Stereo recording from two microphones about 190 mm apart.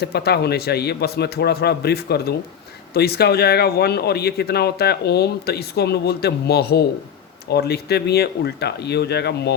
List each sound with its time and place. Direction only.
0.0 s speech: 60° left (ahead or behind)